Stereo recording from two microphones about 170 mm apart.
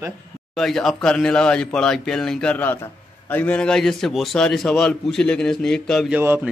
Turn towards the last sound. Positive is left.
turn(degrees=-10)  # may be behind; listen again after turning